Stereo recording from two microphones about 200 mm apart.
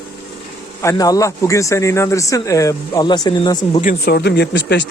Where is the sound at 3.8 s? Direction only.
50° left (ahead or behind).